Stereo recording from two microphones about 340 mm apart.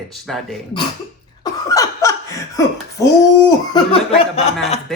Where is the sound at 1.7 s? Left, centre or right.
Centre.